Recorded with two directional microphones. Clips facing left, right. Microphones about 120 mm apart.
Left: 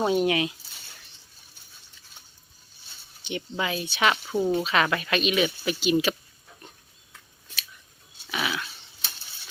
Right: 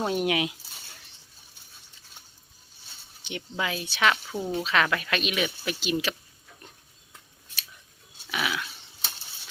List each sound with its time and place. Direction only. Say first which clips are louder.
0.0 s speech: left 4 dB; 5° left (ahead or behind)
0.3 s speech: left 2 dB; 10° right (ahead or behind)
3.2 s speech: left 2 dB; centre (ahead or behind)
4.3 s speech: left 7 dB; 20° left (ahead or behind)
4.5 s speech: left 2 dB; 5° left (ahead or behind)
8.3 s dog: even; centre (ahead or behind)